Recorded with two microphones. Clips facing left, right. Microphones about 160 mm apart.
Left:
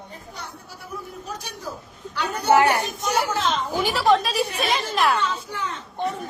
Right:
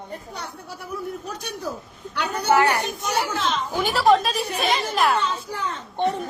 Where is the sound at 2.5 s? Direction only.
20° left (ahead or behind).